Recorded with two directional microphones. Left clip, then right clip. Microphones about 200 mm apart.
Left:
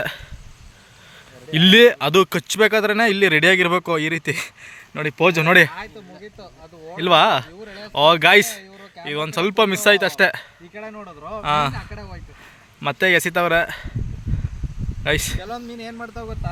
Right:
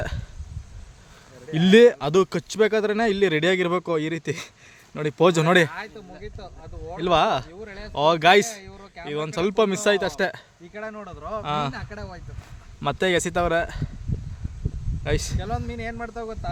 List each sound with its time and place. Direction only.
0.0 s burping: centre (ahead or behind)
1.5 s speech: centre (ahead or behind)
5.0 s speech: 20° right (ahead or behind)
5.8 s speech: 50° left (ahead or behind)
7.0 s speech: 5° left (ahead or behind)
15.0 s speech: 5° left (ahead or behind)
15.7 s speech: 45° left (ahead or behind)
16.0 s speech: 30° left (ahead or behind)